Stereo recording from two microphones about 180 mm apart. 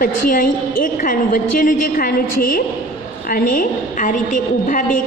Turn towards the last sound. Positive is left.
turn(degrees=45)  # may be behind; listen again after turning